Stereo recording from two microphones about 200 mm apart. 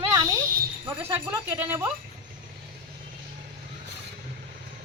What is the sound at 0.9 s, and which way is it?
Speech, 10° right (ahead or behind).